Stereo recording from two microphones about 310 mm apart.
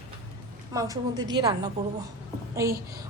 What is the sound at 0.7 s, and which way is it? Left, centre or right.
Speech, centre.